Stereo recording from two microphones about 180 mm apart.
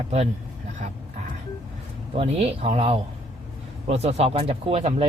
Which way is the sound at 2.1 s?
35° right (ahead or behind).